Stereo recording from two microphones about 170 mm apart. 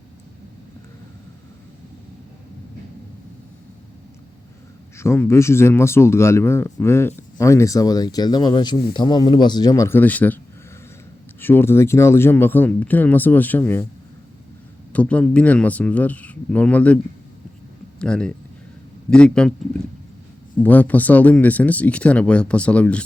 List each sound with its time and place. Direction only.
4.9 s speech: 15° left (ahead or behind)
14.9 s speech: 5° left (ahead or behind)
18.0 s a man's voice: 5° left (ahead or behind)
20.6 s speech: 10° left (ahead or behind)